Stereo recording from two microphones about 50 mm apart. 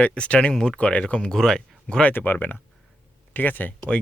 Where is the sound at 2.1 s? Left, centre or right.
Left.